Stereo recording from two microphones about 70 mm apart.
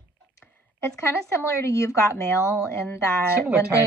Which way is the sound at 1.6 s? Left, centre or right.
Left.